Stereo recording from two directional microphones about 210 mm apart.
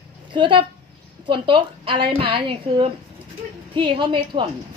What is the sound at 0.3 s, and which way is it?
A woman's voice, 25° right (ahead or behind).